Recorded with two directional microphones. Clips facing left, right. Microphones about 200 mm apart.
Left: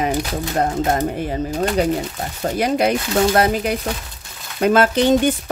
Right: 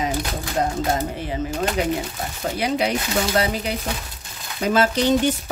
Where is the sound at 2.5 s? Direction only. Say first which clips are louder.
Left 5 dB; 45° left (ahead or behind).